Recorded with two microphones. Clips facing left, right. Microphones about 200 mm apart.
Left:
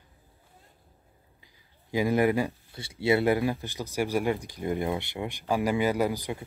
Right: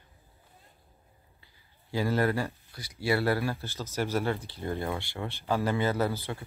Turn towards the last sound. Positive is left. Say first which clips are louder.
# left 2 dB
turn(degrees=15)  # may be behind; listen again after turning